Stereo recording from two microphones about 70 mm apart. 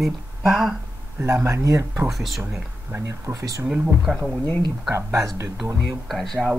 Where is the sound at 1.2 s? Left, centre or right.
Right.